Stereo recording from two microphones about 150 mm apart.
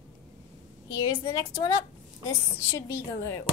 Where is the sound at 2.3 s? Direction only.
15° left (ahead or behind).